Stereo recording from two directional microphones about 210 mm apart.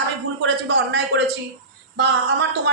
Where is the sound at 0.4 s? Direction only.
55° right (ahead or behind).